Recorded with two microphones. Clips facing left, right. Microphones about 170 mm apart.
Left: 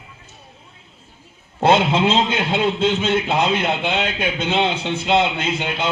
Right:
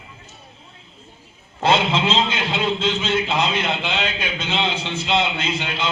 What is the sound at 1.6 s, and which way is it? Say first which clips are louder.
A man's voice: left 3 dB; 55° left (ahead or behind).